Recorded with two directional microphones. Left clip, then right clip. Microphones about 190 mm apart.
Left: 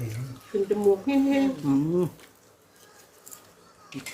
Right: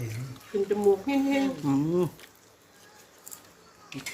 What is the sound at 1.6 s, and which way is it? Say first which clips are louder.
Speech: left 1 dB; 15° right (ahead or behind).